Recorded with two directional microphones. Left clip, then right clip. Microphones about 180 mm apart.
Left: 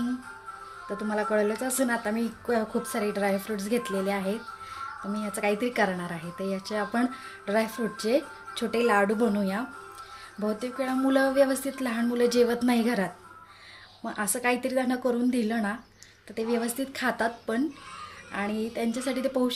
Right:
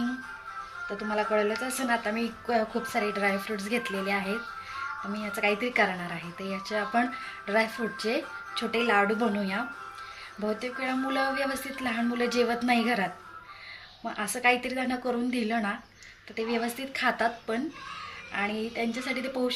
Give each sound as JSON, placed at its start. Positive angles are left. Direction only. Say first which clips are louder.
{"t": 1.1, "sound": "a woman's voice", "louder": "even", "side_deg": 60}
{"t": 14.1, "sound": "a woman's voice", "louder": "right 2 dB", "side_deg": 55}